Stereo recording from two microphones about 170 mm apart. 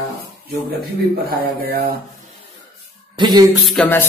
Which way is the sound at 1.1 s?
65° right (ahead or behind).